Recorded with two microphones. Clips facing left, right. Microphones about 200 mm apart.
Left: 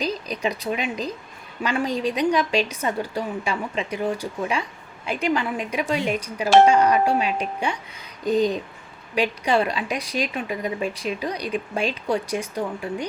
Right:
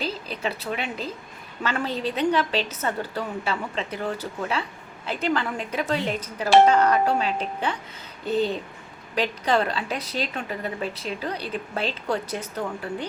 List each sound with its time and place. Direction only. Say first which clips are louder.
0.0 s a woman's voice: left 3 dB; 15° left (ahead or behind)